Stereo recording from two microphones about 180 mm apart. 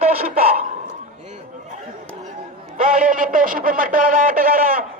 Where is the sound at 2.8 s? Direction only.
50° right (ahead or behind).